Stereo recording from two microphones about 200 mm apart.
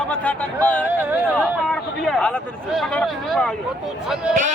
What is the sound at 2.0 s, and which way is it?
Speech, centre (ahead or behind).